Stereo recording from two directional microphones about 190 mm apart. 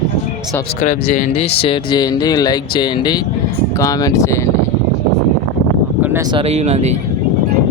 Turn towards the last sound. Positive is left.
turn(degrees=-35)  # may be behind; listen again after turning